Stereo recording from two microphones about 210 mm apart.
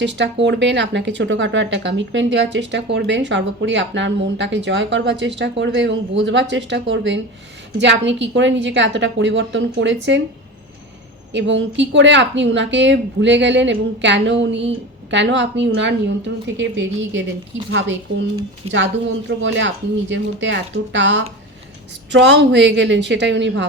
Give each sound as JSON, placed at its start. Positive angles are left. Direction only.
{"t": 0.0, "sound": "speech", "side_deg": -60}
{"t": 11.3, "sound": "speech", "side_deg": -60}
{"t": 19.4, "sound": "speech", "side_deg": -60}